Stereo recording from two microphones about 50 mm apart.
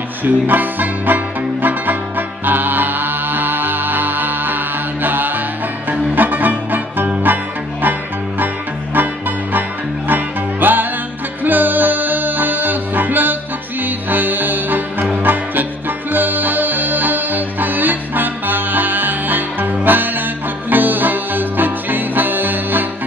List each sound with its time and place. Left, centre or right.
0.2 s music: right
8.9 s music: right